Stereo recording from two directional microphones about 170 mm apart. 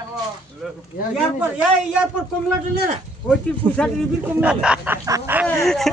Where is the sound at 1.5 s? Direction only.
5° right (ahead or behind).